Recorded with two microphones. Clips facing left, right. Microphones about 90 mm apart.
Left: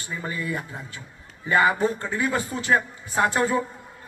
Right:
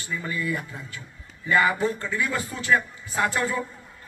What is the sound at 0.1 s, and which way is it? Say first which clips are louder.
A man's voice: right 1 dB; 30° left (ahead or behind).